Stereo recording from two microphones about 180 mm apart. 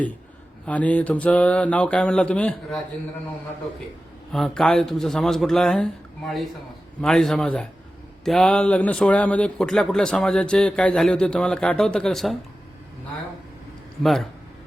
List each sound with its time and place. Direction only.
0.6 s speech: 10° left (ahead or behind)
4.3 s a man's voice: centre (ahead or behind)
14.0 s a man's voice: centre (ahead or behind)